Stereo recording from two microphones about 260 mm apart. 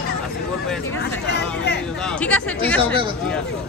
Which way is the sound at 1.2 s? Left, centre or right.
Left.